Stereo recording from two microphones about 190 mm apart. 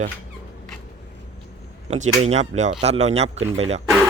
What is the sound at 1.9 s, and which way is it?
A man's voice, 35° right (ahead or behind).